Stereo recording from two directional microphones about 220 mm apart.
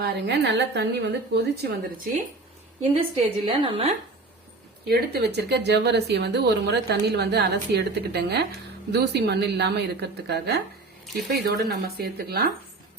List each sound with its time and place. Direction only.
0.0 s speech: 50° right (ahead or behind)
2.9 s a woman's voice: 25° right (ahead or behind)
4.9 s speech: 50° right (ahead or behind)